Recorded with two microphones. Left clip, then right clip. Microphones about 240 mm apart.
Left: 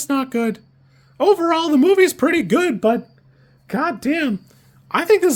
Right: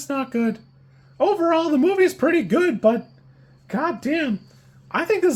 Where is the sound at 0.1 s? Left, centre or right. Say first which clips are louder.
Left 3 dB; left.